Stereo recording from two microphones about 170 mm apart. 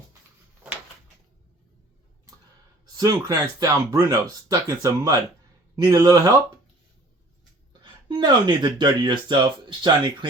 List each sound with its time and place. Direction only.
3.0 s speech: 20° right (ahead or behind)
8.0 s speech: 30° right (ahead or behind)